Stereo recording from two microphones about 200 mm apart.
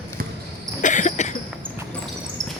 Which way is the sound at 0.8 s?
40° left (ahead or behind).